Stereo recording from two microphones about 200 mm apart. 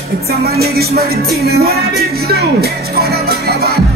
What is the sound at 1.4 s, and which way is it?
Speech, 50° right (ahead or behind).